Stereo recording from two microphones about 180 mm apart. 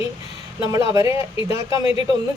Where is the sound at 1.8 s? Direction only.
30° left (ahead or behind).